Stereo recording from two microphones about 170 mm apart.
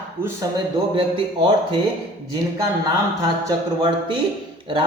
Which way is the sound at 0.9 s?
30° right (ahead or behind).